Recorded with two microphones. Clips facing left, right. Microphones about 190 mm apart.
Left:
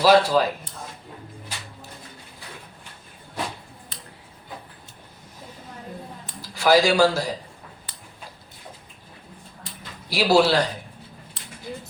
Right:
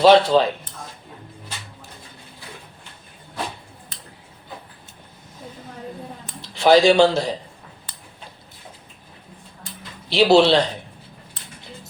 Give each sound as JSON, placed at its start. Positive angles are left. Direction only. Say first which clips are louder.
{"t": 0.0, "sound": "a man's voice", "louder": "right 3 dB", "side_deg": -25}
{"t": 6.4, "sound": "a man's voice", "louder": "right 4 dB", "side_deg": -25}
{"t": 10.1, "sound": "a man's voice", "louder": "right 4 dB", "side_deg": -25}